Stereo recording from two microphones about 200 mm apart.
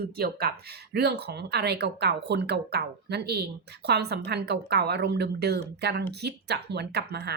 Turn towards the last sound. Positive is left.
turn(degrees=-55)  # may be behind; listen again after turning